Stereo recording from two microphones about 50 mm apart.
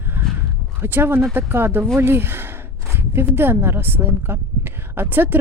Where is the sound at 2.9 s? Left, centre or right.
Right.